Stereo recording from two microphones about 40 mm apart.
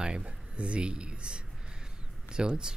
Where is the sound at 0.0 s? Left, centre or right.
Right.